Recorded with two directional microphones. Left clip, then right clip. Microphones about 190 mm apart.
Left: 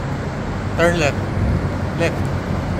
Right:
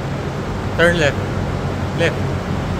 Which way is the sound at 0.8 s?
30° right (ahead or behind).